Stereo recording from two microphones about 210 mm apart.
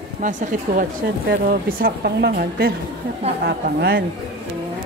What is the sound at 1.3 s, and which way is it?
A woman's voice, 45° right (ahead or behind).